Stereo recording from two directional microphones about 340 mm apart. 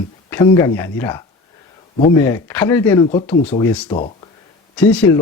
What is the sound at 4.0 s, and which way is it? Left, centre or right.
Speech, centre.